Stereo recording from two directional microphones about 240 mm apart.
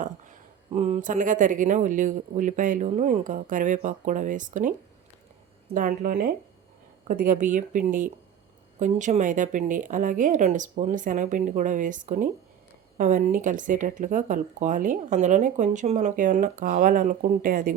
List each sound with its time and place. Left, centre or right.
0.0 s speech: right
5.7 s speech: right